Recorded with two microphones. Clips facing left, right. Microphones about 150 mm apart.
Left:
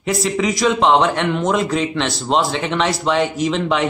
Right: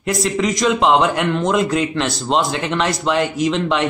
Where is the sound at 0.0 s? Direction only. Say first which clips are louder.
Even; centre (ahead or behind).